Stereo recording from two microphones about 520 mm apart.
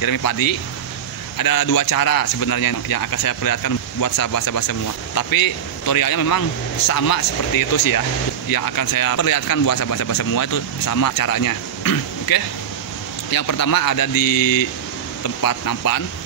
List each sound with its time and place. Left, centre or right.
0.0 s a man's voice: left